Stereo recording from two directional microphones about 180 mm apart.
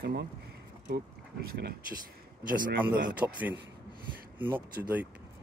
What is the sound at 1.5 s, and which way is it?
Speech, 65° right (ahead or behind).